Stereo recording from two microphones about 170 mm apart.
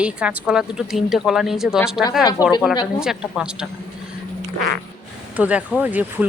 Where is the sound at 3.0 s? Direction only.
5° right (ahead or behind).